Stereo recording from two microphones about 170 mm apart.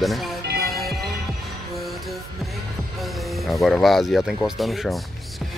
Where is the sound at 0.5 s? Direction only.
65° right (ahead or behind).